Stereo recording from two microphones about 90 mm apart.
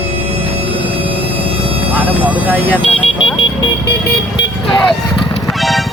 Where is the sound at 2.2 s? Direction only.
20° right (ahead or behind).